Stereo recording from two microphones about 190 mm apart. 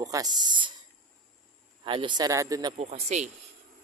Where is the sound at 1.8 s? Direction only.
25° right (ahead or behind).